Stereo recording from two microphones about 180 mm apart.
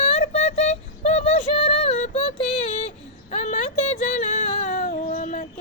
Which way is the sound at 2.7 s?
40° left (ahead or behind).